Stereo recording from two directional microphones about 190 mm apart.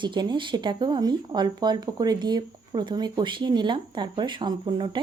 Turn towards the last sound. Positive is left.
turn(degrees=-25)  # may be behind; listen again after turning